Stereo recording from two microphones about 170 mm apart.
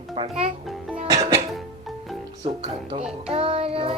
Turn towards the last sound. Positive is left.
turn(degrees=-35)  # may be behind; listen again after turning